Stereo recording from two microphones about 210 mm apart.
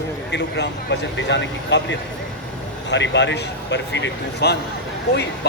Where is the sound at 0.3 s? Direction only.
55° left (ahead or behind).